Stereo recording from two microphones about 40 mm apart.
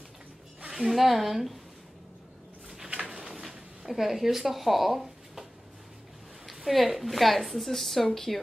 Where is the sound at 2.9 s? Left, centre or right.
Right.